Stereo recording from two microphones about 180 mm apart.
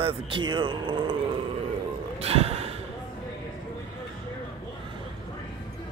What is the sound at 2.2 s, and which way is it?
Gasp, 35° right (ahead or behind).